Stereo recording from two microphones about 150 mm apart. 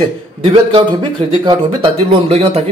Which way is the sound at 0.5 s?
35° right (ahead or behind).